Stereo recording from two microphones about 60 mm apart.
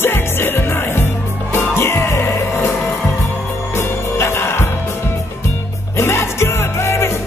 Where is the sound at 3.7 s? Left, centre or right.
Left.